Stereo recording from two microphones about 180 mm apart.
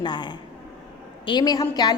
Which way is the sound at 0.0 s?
25° left (ahead or behind).